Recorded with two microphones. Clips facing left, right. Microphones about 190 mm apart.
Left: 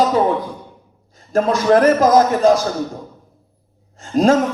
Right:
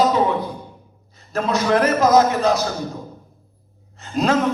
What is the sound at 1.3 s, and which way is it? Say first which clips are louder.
A man's voice: left 5 dB; 45° left (ahead or behind).